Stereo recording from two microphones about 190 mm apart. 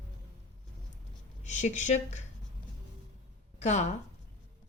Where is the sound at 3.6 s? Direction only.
35° left (ahead or behind).